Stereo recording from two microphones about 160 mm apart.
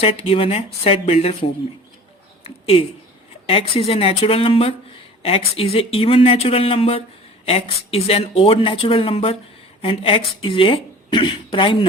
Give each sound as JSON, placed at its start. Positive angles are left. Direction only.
{"t": 0.0, "sound": "speech", "side_deg": 40}
{"t": 2.4, "sound": "a sound", "side_deg": 35}
{"t": 3.4, "sound": "speech", "side_deg": 35}